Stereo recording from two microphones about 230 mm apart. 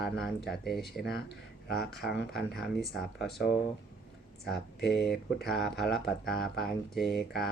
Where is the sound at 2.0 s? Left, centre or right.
Centre.